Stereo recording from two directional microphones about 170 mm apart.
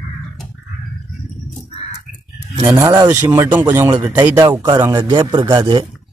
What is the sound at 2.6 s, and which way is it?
Speech, 15° right (ahead or behind).